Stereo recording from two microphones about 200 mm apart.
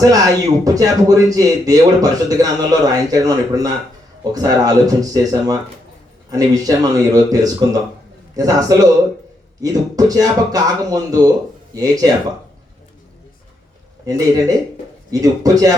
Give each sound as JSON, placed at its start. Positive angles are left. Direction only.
{"t": 0.6, "sound": "a man's voice", "side_deg": -15}
{"t": 14.0, "sound": "a man's voice", "side_deg": -20}